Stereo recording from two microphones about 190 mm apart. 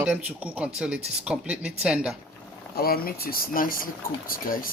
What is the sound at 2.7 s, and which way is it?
Speech, 50° left (ahead or behind).